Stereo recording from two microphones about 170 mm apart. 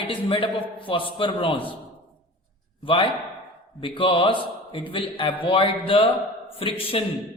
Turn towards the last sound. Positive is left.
turn(degrees=35)  # may be behind; listen again after turning